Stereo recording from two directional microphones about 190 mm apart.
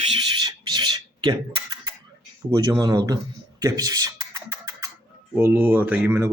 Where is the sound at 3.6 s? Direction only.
20° right (ahead or behind).